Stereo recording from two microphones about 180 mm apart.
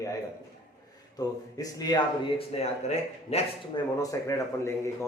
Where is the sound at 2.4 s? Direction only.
35° left (ahead or behind).